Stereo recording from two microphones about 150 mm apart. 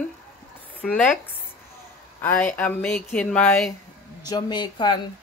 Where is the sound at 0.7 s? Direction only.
10° left (ahead or behind).